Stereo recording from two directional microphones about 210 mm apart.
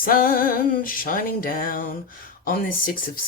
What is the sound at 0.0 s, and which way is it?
Music, 40° left (ahead or behind).